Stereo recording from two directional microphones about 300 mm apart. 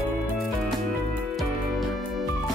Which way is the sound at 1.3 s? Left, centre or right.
Centre.